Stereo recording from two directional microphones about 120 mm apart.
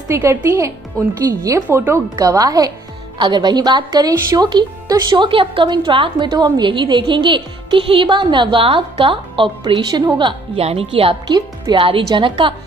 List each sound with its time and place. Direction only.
0.1 s speech: 20° right (ahead or behind)
2.1 s a woman's voice: 30° right (ahead or behind)
10.6 s speech: 55° right (ahead or behind)
11.2 s a woman's voice: 35° right (ahead or behind)